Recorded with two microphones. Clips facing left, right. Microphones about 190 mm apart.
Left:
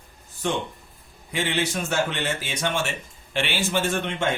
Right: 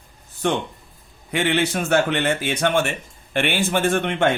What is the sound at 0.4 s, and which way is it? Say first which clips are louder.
A man's voice: right 4 dB; 60° right (ahead or behind).